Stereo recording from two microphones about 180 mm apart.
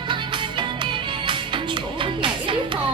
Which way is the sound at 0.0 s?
25° right (ahead or behind).